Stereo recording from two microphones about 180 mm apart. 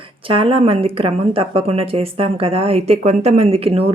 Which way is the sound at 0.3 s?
30° right (ahead or behind).